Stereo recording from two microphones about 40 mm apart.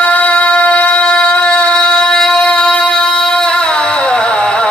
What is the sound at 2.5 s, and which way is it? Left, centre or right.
Music, left.